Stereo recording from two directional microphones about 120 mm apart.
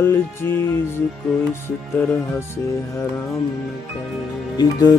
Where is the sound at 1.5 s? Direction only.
15° left (ahead or behind).